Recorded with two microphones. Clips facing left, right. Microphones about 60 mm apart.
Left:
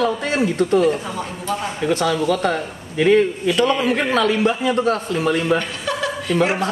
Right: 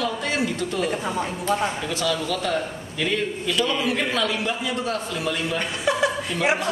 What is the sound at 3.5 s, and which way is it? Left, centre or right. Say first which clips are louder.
A man's voice: left 5 dB; left.